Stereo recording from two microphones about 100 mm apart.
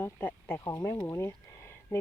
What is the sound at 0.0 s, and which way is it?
Speech, 20° left (ahead or behind).